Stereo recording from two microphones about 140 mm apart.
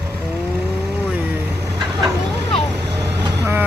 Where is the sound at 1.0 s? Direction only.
10° right (ahead or behind).